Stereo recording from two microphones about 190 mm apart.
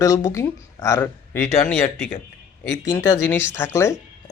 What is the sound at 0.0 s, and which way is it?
Speech, 15° left (ahead or behind).